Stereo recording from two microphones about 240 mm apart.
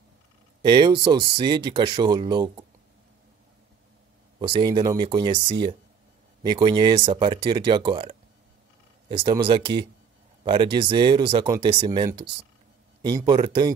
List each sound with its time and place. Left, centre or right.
0.6 s speech: centre
4.4 s speech: centre
6.4 s a man's voice: centre